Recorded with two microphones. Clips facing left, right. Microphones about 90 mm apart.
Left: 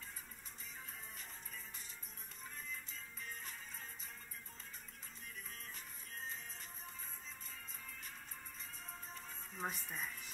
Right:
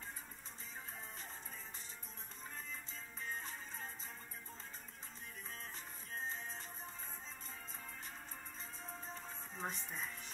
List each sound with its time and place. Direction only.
2.5 s music: 30° right (ahead or behind)
6.1 s music: 30° right (ahead or behind)
9.6 s speech: 5° left (ahead or behind)